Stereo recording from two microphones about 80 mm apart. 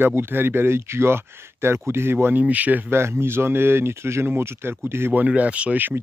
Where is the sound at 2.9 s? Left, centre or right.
Right.